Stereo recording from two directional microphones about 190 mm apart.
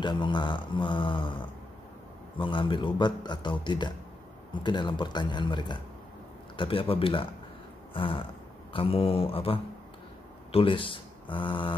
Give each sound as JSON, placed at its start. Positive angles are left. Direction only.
{"t": 0.0, "sound": "a man's voice", "side_deg": 25}